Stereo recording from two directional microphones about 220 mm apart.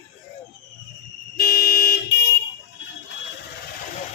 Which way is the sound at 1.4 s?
40° left (ahead or behind).